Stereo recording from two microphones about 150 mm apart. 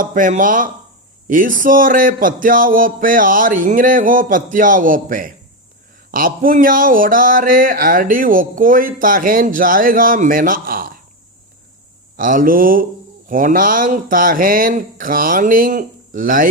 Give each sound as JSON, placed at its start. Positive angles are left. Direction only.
{"t": 0.0, "sound": "speech", "side_deg": -60}
{"t": 12.1, "sound": "speech", "side_deg": -65}